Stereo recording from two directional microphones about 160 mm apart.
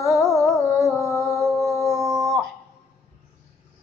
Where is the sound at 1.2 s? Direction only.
Centre (ahead or behind).